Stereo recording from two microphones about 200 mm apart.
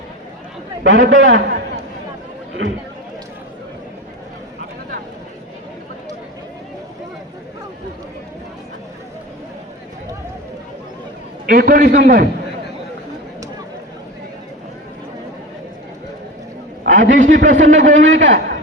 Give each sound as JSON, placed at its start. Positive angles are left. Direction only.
{"t": 0.9, "sound": "a man's voice", "side_deg": -65}
{"t": 11.4, "sound": "a man's voice", "side_deg": -50}
{"t": 16.8, "sound": "a man's voice", "side_deg": -40}
{"t": 17.9, "sound": "a man's voice", "side_deg": -70}